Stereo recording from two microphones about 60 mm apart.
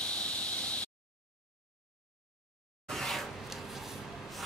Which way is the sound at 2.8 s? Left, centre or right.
Centre.